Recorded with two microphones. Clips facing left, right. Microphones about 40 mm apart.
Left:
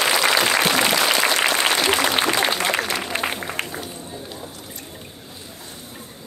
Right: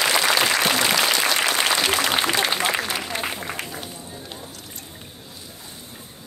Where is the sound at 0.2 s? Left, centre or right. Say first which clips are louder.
Left 2 dB; left.